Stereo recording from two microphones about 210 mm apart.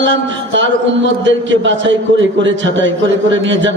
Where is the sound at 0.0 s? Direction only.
60° right (ahead or behind).